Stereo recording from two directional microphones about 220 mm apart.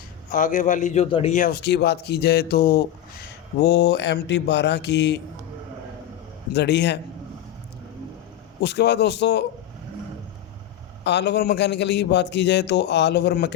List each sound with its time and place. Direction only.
0.3 s a man's voice: 35° left (ahead or behind); by 5.2 s 50° left (ahead or behind)
6.5 s a man's voice: 50° left (ahead or behind)
8.6 s a man's voice: 50° left (ahead or behind)
11.0 s a man's voice: 50° left (ahead or behind)